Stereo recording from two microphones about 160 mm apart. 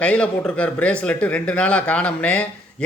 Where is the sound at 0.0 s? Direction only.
5° left (ahead or behind).